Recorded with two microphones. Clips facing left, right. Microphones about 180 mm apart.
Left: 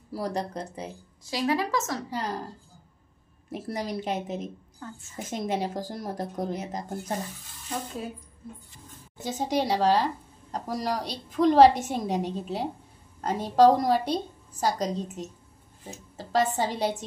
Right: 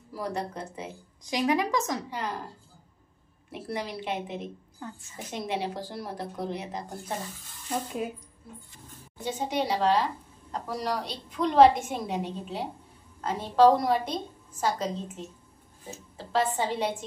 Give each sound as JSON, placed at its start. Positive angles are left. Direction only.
{"t": 0.1, "sound": "a woman's voice", "side_deg": 35}
{"t": 1.2, "sound": "speech", "side_deg": -15}
{"t": 2.0, "sound": "a woman's voice", "side_deg": 40}
{"t": 3.5, "sound": "a woman's voice", "side_deg": 40}
{"t": 4.8, "sound": "speech", "side_deg": -15}
{"t": 5.3, "sound": "speech", "side_deg": 45}
{"t": 9.2, "sound": "a woman's voice", "side_deg": 40}